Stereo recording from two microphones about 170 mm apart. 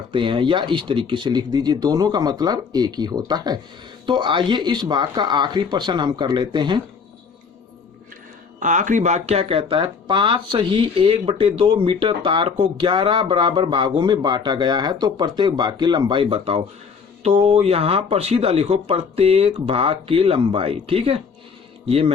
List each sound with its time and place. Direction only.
0.1 s speech: 30° right (ahead or behind)
8.5 s speech: 50° right (ahead or behind)